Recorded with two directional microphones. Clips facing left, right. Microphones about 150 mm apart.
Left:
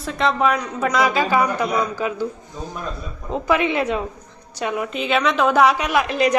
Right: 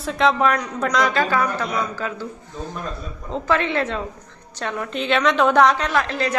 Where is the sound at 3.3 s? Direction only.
15° left (ahead or behind).